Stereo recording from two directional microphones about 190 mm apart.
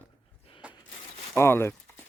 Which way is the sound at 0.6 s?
5° right (ahead or behind).